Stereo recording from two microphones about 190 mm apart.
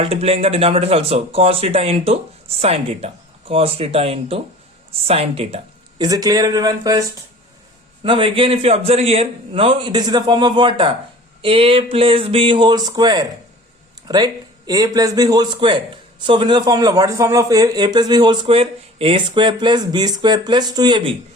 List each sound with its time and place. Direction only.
0.0 s speech: 30° right (ahead or behind)
6.0 s a man's voice: 20° right (ahead or behind)
8.0 s a man's voice: 30° right (ahead or behind)